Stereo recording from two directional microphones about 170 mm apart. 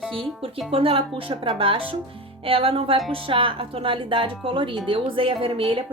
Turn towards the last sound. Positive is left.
turn(degrees=-30)  # may be behind; listen again after turning